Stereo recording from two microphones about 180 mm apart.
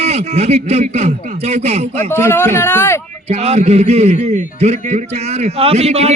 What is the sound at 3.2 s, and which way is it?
Speech, 35° right (ahead or behind).